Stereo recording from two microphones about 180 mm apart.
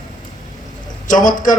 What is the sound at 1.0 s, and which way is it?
Speech, 45° left (ahead or behind).